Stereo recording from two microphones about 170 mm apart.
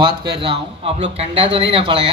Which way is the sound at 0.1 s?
65° right (ahead or behind).